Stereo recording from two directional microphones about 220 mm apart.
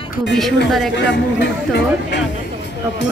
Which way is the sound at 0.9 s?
50° left (ahead or behind).